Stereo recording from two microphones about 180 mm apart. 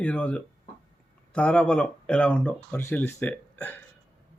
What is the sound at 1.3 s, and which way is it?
Speech, 5° left (ahead or behind).